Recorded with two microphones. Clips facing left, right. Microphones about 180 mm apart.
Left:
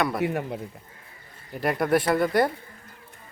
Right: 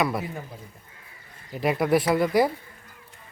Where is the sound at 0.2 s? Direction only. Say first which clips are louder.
Left 8 dB; 70° left (ahead or behind).